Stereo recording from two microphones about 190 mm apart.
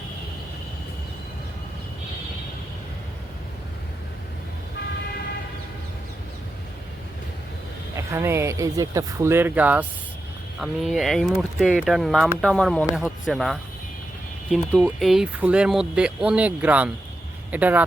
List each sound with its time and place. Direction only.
7.9 s speech: 15° right (ahead or behind)